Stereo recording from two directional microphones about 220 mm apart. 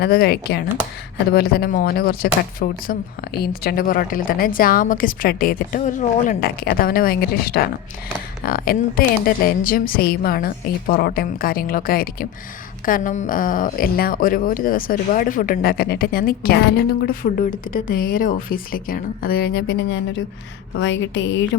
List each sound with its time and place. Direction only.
0.0 s a woman's voice: 45° left (ahead or behind)